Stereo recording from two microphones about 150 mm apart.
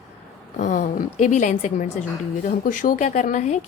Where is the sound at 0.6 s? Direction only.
60° left (ahead or behind).